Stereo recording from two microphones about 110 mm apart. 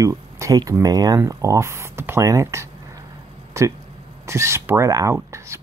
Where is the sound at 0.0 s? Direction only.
30° right (ahead or behind).